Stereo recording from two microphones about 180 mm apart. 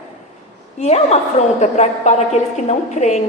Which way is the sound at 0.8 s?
40° left (ahead or behind).